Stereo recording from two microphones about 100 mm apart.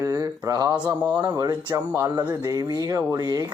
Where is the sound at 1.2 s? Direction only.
40° right (ahead or behind).